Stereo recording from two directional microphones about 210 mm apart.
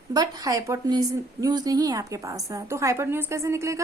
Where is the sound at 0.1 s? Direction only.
15° right (ahead or behind).